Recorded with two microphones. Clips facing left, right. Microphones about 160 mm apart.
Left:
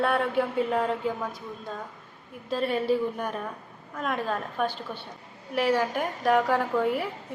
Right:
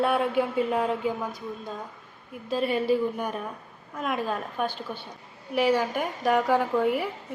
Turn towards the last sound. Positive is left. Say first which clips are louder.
# right 2 dB
turn(degrees=-5)  # may be behind; listen again after turning